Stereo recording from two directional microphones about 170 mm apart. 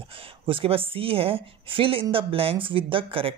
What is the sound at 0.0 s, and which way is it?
Speech, 30° right (ahead or behind).